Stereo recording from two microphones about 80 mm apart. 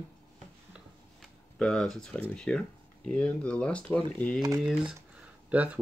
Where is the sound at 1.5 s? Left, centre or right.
Centre.